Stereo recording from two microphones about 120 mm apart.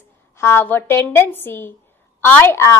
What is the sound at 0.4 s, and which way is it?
A woman's voice, 20° left (ahead or behind).